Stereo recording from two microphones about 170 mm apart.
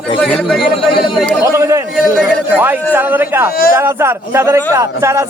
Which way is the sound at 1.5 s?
15° right (ahead or behind).